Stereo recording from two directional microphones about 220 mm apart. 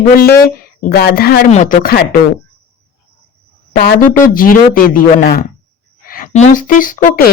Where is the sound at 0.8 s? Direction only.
45° left (ahead or behind).